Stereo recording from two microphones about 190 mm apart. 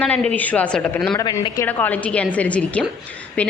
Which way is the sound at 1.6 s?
10° left (ahead or behind).